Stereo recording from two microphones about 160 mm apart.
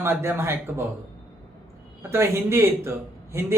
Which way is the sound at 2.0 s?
15° right (ahead or behind).